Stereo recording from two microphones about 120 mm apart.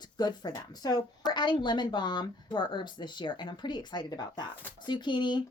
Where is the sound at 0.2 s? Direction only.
35° left (ahead or behind).